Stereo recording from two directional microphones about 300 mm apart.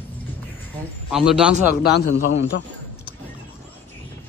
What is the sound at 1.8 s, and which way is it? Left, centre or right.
Speech, left.